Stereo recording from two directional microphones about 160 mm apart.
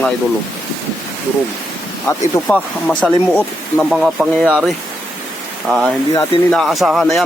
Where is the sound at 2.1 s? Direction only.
15° left (ahead or behind).